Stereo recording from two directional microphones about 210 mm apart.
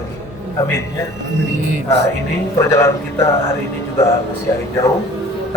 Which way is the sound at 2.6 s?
15° left (ahead or behind).